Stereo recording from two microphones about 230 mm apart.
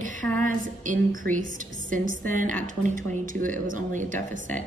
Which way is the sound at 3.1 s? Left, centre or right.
Right.